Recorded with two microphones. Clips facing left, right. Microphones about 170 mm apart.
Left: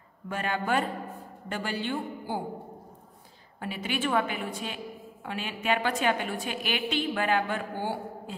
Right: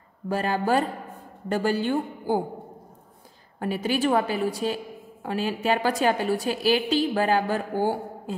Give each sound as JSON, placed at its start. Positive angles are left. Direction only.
{"t": 0.3, "sound": "a woman's voice", "side_deg": -35}
{"t": 3.5, "sound": "a woman's voice", "side_deg": -40}